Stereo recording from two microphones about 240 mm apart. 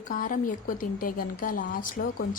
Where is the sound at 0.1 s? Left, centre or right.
Left.